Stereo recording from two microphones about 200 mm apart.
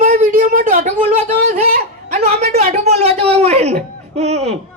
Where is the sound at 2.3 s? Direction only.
30° right (ahead or behind).